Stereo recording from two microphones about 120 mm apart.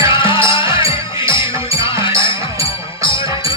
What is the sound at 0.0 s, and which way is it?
Music, 40° left (ahead or behind).